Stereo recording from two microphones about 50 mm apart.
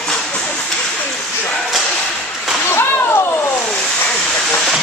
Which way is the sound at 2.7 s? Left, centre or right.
Left.